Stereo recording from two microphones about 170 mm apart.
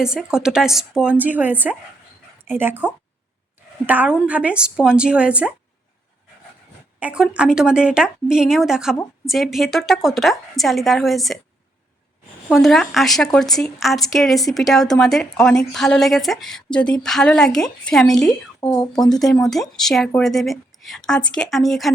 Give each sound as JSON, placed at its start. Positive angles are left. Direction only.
{"t": 0.0, "sound": "a woman's voice", "side_deg": -5}
{"t": 7.0, "sound": "a woman's voice", "side_deg": -5}
{"t": 12.5, "sound": "a woman's voice", "side_deg": 0}
{"t": 18.6, "sound": "speech", "side_deg": 25}
{"t": 18.9, "sound": "a woman's voice", "side_deg": 5}